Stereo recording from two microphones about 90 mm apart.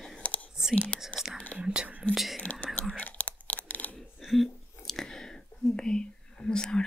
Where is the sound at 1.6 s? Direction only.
10° right (ahead or behind).